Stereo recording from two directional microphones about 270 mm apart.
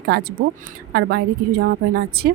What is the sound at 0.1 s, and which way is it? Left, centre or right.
Speech, right.